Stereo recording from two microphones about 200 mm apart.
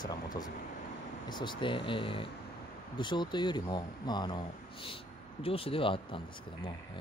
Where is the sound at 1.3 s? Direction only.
25° left (ahead or behind).